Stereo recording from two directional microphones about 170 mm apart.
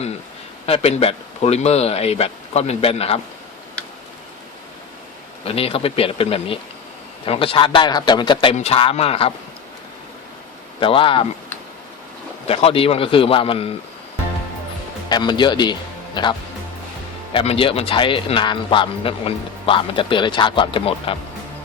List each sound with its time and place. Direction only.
0.6 s a man's voice: 35° left (ahead or behind)
5.5 s a man's voice: 35° left (ahead or behind)
10.8 s a man's voice: 30° left (ahead or behind)
12.5 s a man's voice: 35° left (ahead or behind)
15.1 s speech: 25° left (ahead or behind)
17.3 s a man's voice: 35° left (ahead or behind)